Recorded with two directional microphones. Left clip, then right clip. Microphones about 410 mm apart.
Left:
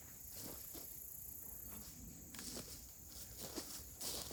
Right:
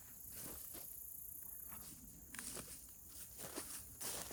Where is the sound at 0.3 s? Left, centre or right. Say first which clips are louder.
Left 2 dB; right.